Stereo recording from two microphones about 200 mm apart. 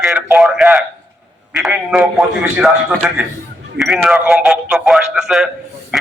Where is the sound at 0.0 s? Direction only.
Centre (ahead or behind).